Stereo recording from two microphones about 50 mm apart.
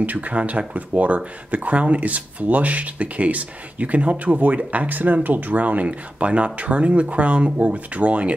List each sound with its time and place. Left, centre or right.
0.0 s speech: right